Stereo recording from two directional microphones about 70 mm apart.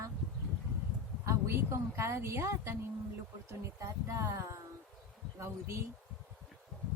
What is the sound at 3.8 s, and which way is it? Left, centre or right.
Speech, right.